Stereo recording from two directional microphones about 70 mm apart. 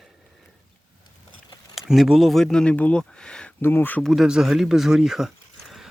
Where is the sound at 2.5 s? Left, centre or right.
Centre.